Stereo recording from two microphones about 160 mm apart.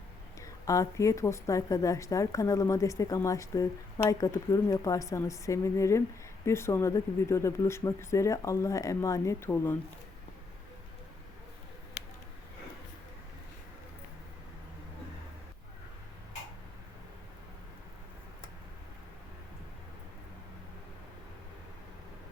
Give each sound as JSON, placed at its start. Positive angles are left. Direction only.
{"t": 0.3, "sound": "a woman's voice", "side_deg": 20}